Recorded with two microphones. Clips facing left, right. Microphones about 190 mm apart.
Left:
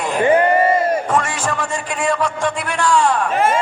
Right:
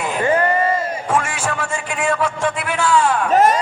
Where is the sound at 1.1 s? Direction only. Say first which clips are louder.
Left 1 dB; 5° right (ahead or behind).